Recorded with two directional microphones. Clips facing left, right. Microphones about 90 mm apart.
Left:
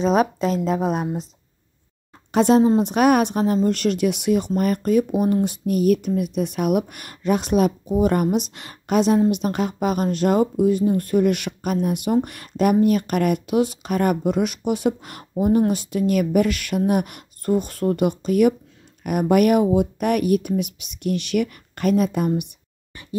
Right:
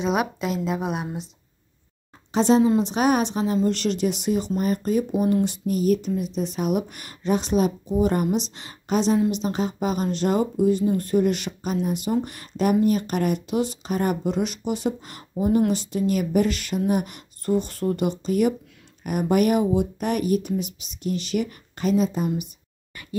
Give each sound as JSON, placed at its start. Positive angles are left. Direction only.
{"t": 0.0, "sound": "a woman's voice", "side_deg": 35}
{"t": 2.3, "sound": "speech", "side_deg": 55}
{"t": 5.2, "sound": "speech", "side_deg": 45}